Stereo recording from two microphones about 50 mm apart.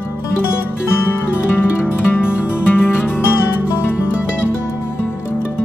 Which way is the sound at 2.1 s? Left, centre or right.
Left.